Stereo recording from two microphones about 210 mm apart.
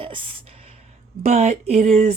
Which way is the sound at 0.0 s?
25° right (ahead or behind).